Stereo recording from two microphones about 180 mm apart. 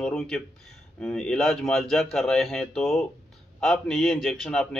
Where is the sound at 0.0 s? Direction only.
5° left (ahead or behind).